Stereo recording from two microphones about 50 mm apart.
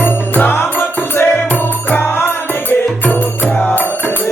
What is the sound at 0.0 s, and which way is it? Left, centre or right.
Music, left.